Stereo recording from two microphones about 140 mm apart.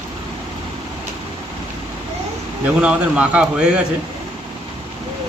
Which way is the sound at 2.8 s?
5° right (ahead or behind).